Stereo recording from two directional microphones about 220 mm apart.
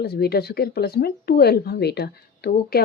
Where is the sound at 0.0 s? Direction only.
45° left (ahead or behind).